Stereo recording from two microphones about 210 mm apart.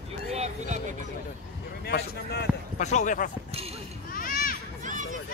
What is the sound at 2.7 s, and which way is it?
Speech, 35° left (ahead or behind).